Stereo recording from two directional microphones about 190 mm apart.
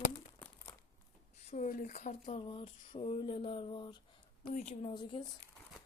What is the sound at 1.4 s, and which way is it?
Speech, 40° left (ahead or behind).